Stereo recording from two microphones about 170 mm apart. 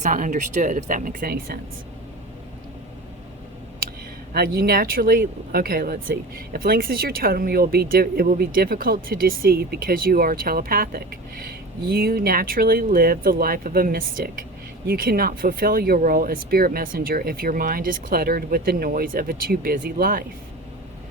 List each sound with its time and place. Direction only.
0.0 s speech: 50° right (ahead or behind)
4.4 s speech: 60° right (ahead or behind)